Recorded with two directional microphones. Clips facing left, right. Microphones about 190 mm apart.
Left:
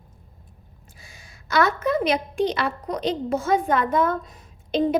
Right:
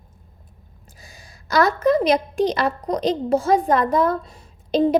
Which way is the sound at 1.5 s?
35° right (ahead or behind).